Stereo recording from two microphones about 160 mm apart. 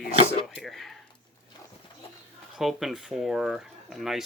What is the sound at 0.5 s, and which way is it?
Speech, centre (ahead or behind).